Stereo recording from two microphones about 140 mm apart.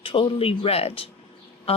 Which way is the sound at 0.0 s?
40° left (ahead or behind).